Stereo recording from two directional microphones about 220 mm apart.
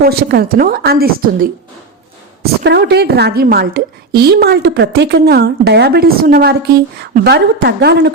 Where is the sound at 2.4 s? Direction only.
50° right (ahead or behind).